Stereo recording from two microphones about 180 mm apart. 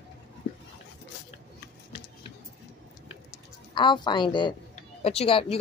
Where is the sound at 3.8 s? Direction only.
25° left (ahead or behind).